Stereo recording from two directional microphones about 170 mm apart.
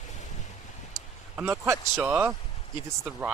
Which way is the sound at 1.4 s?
15° right (ahead or behind).